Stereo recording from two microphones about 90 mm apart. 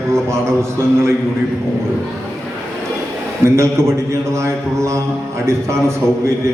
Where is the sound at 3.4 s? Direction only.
30° right (ahead or behind).